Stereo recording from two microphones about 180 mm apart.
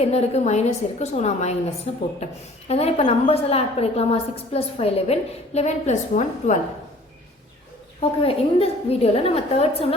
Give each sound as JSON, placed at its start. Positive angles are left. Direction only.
{"t": 0.0, "sound": "a woman's voice", "side_deg": 35}
{"t": 8.2, "sound": "a woman's voice", "side_deg": 30}